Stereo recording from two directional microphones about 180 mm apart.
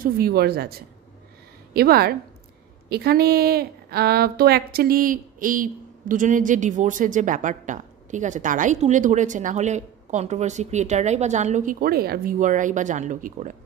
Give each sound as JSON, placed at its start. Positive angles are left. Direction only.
{"t": 0.0, "sound": "a woman's voice", "side_deg": -60}